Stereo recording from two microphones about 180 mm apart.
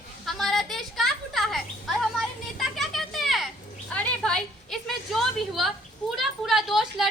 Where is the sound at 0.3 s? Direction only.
Centre (ahead or behind).